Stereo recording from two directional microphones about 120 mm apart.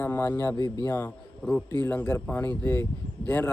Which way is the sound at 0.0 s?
15° left (ahead or behind).